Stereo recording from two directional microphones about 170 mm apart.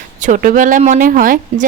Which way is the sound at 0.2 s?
50° right (ahead or behind).